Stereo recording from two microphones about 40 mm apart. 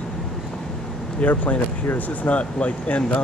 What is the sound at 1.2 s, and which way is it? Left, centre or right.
Speech, left.